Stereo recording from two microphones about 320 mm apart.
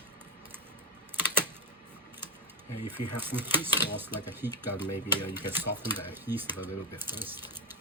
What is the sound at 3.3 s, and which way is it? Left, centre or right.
Cutlery, centre.